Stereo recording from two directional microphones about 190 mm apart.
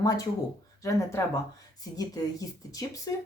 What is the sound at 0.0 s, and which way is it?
Speech, 20° left (ahead or behind).